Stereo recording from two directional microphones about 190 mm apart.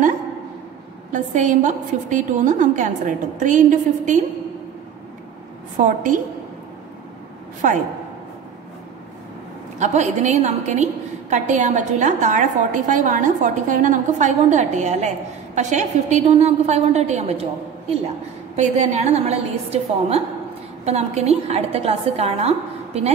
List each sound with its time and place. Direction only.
1.1 s a woman's voice: 40° right (ahead or behind)
5.8 s a woman's voice: 45° right (ahead or behind)
7.6 s a woman's voice: 45° right (ahead or behind)
9.8 s a woman's voice: 40° right (ahead or behind)
18.6 s a woman's voice: 35° right (ahead or behind)